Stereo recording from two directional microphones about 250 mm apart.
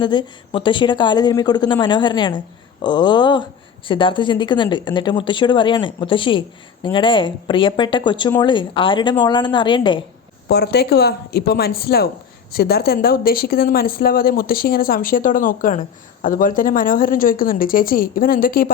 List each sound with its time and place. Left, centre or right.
0.0 s a woman's voice: centre
10.5 s speech: left